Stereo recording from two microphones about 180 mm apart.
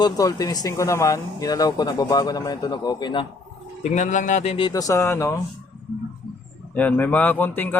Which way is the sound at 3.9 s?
45° left (ahead or behind).